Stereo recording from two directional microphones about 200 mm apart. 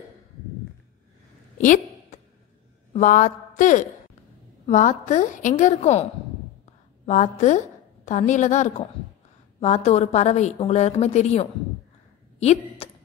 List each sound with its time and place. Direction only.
1.6 s a sound: 40° left (ahead or behind)
2.9 s a woman's voice: 40° left (ahead or behind)
7.1 s a woman's voice: 35° left (ahead or behind)